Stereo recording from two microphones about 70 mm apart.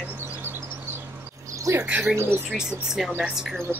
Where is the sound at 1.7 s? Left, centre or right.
Right.